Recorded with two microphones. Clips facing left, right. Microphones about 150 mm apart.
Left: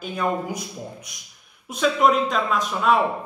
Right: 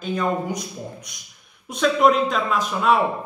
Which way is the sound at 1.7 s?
Centre (ahead or behind).